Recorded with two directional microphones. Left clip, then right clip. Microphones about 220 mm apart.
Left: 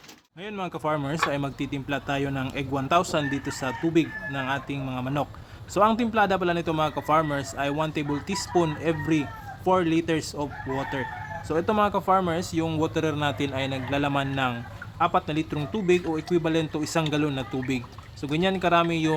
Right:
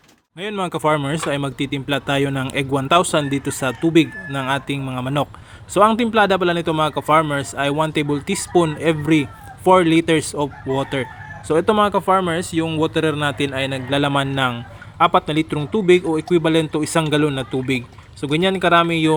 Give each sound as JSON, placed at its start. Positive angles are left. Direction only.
{"t": 0.3, "sound": "speech", "side_deg": -25}
{"t": 12.9, "sound": "speech", "side_deg": -15}
{"t": 16.5, "sound": "speech", "side_deg": -20}